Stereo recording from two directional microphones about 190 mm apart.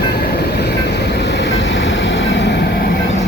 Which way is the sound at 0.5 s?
60° left (ahead or behind).